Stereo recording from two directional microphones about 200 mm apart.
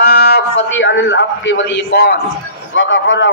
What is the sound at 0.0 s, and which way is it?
A man's voice, 55° left (ahead or behind).